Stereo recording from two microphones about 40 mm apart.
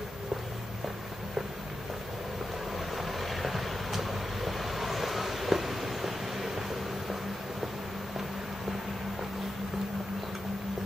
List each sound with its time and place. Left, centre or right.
3.0 s vehicle: centre